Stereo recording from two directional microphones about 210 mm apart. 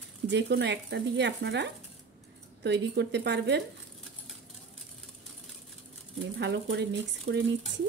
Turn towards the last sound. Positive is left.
turn(degrees=-60)  # may be behind; listen again after turning